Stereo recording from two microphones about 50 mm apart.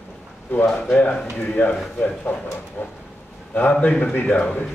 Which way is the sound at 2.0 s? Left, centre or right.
Left.